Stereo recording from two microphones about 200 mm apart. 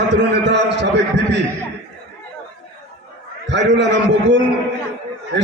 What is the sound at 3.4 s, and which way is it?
Speech, 60° right (ahead or behind).